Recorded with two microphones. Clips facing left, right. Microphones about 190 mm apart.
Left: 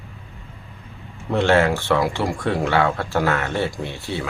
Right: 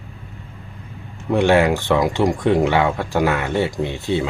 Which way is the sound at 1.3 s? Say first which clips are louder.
Right 2 dB; 15° right (ahead or behind).